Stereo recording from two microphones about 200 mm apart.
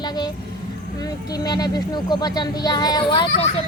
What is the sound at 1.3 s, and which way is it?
A woman's voice, 20° left (ahead or behind).